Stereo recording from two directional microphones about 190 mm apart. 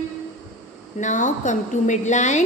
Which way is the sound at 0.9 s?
40° left (ahead or behind).